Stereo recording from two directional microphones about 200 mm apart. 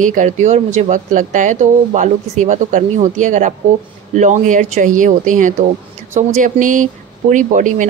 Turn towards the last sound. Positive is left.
turn(degrees=-40)  # may be behind; listen again after turning